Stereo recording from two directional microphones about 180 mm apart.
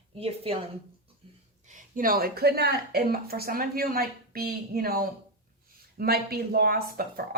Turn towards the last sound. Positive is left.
turn(degrees=-55)  # may be behind; listen again after turning